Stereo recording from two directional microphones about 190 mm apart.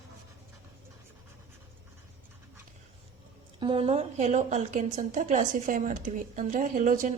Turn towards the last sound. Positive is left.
turn(degrees=-45)  # may be behind; listen again after turning